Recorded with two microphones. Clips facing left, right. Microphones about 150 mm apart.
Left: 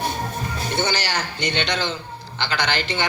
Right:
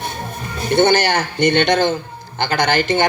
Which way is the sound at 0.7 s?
55° right (ahead or behind).